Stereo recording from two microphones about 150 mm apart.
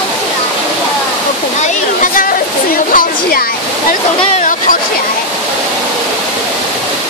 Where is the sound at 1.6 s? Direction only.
60° left (ahead or behind).